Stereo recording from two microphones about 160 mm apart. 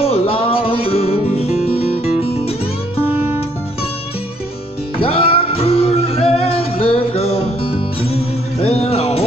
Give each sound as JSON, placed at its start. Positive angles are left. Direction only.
{"t": 0.0, "sound": "music", "side_deg": 40}
{"t": 5.0, "sound": "music", "side_deg": 35}